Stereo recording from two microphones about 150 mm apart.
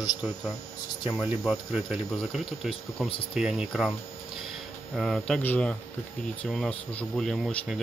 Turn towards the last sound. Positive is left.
turn(degrees=0)  # may be behind; listen again after turning